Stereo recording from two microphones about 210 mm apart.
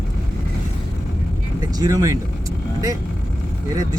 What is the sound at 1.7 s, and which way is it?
Speech, 15° right (ahead or behind).